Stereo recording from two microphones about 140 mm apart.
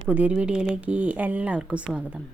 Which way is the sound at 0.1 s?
10° right (ahead or behind).